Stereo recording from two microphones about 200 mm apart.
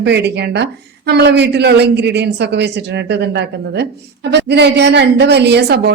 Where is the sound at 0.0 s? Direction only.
55° right (ahead or behind).